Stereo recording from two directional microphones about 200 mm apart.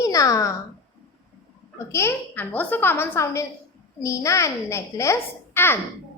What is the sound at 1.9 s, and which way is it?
A woman's voice, 15° left (ahead or behind).